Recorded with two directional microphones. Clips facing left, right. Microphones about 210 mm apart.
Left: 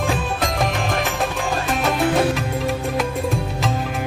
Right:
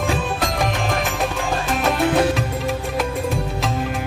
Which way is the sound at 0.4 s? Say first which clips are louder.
Even; centre (ahead or behind).